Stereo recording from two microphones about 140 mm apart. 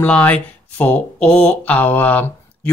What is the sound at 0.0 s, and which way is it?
Speech, 10° left (ahead or behind).